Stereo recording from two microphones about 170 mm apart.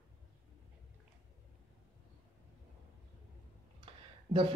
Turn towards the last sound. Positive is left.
turn(degrees=-30)  # may be behind; listen again after turning